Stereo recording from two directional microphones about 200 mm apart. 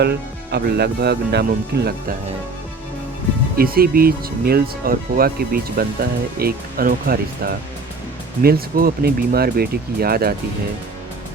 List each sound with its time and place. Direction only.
0.0 s speech: 55° right (ahead or behind)
3.6 s speech: 45° right (ahead or behind)